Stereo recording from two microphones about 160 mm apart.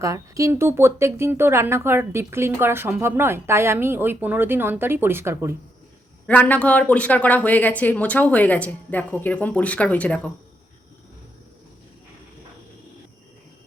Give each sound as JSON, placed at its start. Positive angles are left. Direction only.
{"t": 0.0, "sound": "speech", "side_deg": -20}
{"t": 6.2, "sound": "speech", "side_deg": 10}